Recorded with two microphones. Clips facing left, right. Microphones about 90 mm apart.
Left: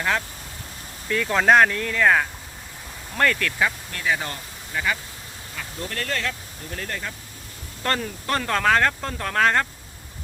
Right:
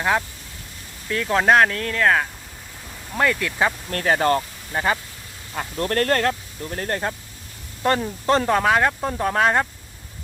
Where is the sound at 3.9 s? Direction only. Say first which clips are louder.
Right 8 dB; 50° right (ahead or behind).